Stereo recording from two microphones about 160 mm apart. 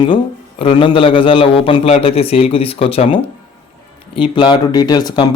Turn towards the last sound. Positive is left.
turn(degrees=25)  # may be behind; listen again after turning